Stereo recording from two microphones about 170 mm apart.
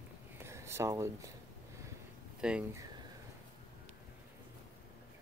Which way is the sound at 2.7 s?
20° right (ahead or behind).